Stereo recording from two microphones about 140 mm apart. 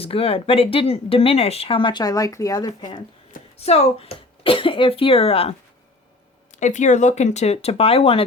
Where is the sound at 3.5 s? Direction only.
45° left (ahead or behind).